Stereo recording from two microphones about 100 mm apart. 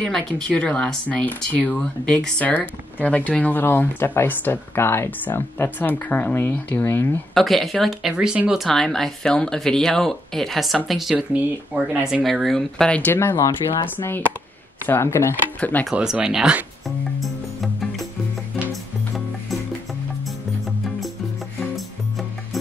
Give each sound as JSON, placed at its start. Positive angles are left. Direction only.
{"t": 0.0, "sound": "speech", "side_deg": 10}
{"t": 7.3, "sound": "speech", "side_deg": 0}
{"t": 8.1, "sound": "speech", "side_deg": -10}
{"t": 11.7, "sound": "speech", "side_deg": -20}
{"t": 12.1, "sound": "speech", "side_deg": 0}
{"t": 13.1, "sound": "speech", "side_deg": 20}
{"t": 15.9, "sound": "speech", "side_deg": -10}
{"t": 17.2, "sound": "music", "side_deg": 0}